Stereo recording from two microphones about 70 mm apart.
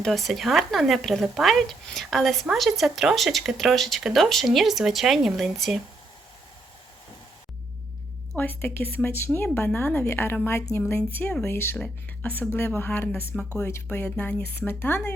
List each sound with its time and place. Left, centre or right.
0.0 s speech: centre
8.4 s a woman's voice: left
13.6 s a woman's voice: left
13.8 s speech: left